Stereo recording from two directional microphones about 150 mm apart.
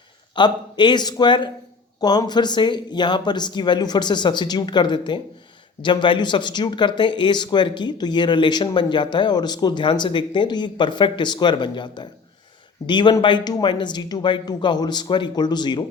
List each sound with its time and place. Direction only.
0.3 s speech: 30° left (ahead or behind)